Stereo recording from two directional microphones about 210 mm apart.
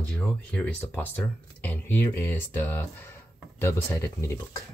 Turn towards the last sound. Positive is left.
turn(degrees=10)  # may be behind; listen again after turning